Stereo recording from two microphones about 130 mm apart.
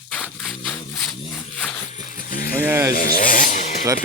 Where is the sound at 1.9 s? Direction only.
90° left.